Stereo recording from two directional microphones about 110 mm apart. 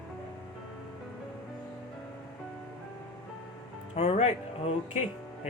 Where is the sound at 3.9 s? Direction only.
70° left (ahead or behind).